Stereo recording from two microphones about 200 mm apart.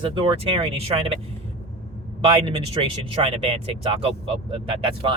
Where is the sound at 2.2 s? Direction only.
30° right (ahead or behind).